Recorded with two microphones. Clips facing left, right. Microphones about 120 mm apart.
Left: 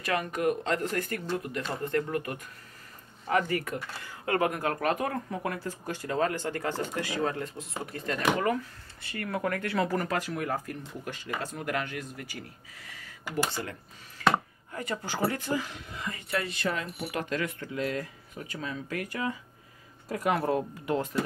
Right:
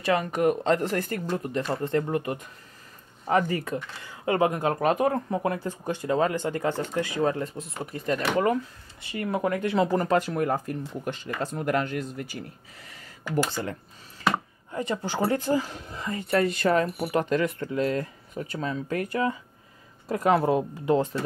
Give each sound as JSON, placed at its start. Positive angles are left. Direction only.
{"t": 0.0, "sound": "speech", "side_deg": -25}
{"t": 14.2, "sound": "chopping", "side_deg": -30}
{"t": 14.7, "sound": "speech", "side_deg": -25}
{"t": 17.1, "sound": "speech", "side_deg": -30}